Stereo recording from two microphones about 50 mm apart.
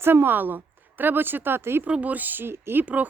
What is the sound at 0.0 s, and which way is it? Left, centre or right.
A woman's voice, right.